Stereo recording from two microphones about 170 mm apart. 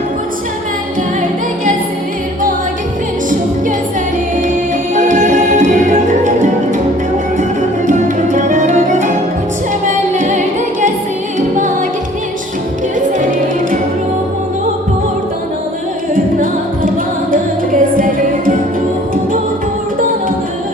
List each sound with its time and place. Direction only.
4.9 s music: 45° right (ahead or behind)
7.9 s music: 45° right (ahead or behind)
16.1 s music: 55° right (ahead or behind)